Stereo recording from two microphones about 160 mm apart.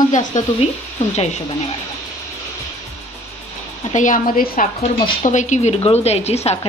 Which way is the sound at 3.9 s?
55° left (ahead or behind).